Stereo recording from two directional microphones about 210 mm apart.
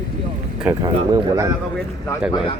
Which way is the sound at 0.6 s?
15° right (ahead or behind).